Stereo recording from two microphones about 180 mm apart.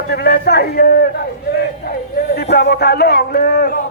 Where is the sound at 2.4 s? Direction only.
65° left (ahead or behind).